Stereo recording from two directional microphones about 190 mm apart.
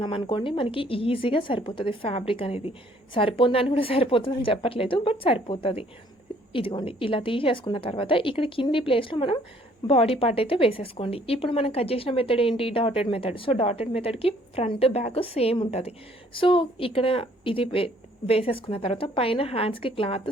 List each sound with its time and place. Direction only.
0.0 s a woman's voice: 25° left (ahead or behind)